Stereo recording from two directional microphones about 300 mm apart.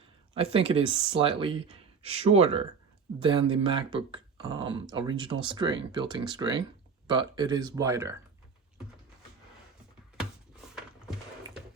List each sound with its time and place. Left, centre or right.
0.3 s speech: centre